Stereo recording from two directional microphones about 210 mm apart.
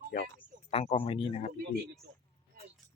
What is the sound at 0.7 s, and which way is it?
Speech, 30° left (ahead or behind).